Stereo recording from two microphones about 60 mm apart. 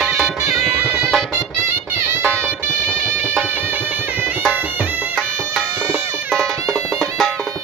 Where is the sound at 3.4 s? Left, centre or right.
Right.